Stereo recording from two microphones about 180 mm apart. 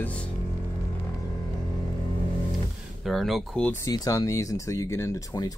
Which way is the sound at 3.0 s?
Centre (ahead or behind).